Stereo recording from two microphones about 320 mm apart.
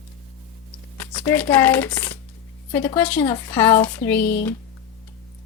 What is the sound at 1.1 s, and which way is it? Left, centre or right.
A woman's voice, centre.